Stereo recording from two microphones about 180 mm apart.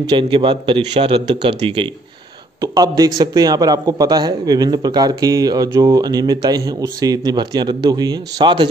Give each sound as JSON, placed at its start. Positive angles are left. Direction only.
{"t": 0.0, "sound": "speech", "side_deg": -25}